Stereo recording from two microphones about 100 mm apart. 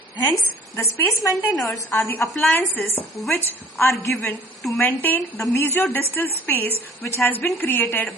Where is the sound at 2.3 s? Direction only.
20° left (ahead or behind).